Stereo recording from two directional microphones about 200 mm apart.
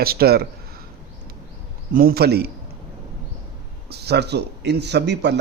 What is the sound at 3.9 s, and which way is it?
A man's voice, 55° right (ahead or behind).